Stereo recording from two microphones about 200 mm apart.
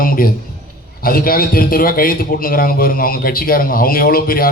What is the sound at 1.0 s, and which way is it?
A man's voice, 45° left (ahead or behind).